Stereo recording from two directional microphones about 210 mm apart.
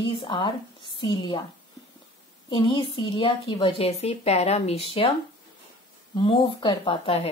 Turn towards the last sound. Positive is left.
turn(degrees=25)  # may be behind; listen again after turning